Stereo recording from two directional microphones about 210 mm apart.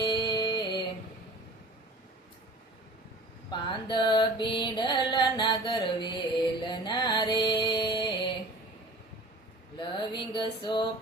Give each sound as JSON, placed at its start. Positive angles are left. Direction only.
{"t": 0.0, "sound": "music", "side_deg": 20}
{"t": 3.5, "sound": "music", "side_deg": 20}
{"t": 9.7, "sound": "music", "side_deg": 20}